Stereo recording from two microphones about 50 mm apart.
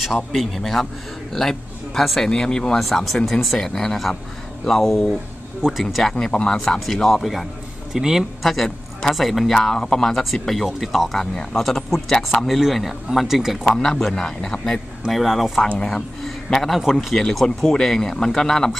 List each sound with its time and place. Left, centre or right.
0.0 s a man's voice: centre
5.7 s speech: centre
6.1 s speech: centre
13.7 s speech: centre
15.0 s speech: centre
16.6 s speech: centre